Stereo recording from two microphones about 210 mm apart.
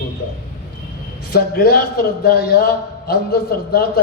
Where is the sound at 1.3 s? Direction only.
50° left (ahead or behind).